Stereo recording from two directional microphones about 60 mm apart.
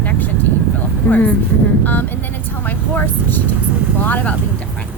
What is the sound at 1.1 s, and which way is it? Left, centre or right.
Speech, left.